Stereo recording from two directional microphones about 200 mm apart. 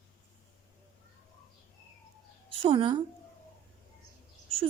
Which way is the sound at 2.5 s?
25° right (ahead or behind).